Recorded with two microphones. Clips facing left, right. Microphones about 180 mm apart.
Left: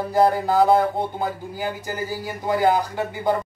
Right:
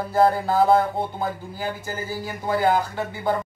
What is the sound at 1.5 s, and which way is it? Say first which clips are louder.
Speech: left 2 dB; 15° left (ahead or behind).